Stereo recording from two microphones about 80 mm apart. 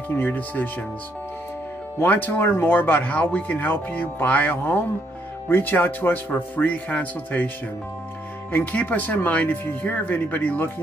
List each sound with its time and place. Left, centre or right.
0.1 s speech: left
2.0 s speech: left